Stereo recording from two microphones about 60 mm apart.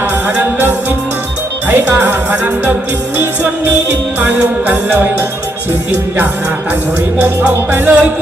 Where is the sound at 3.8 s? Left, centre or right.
Right.